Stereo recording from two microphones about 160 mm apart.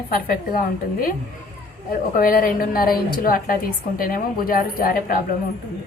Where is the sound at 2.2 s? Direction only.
60° left (ahead or behind).